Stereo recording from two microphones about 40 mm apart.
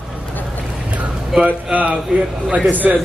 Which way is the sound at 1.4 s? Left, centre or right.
Right.